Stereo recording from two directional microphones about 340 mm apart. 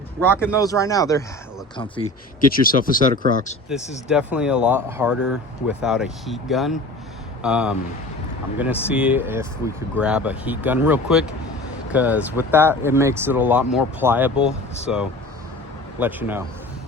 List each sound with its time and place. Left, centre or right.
0.3 s speech: centre
2.5 s speech: left
4.1 s speech: centre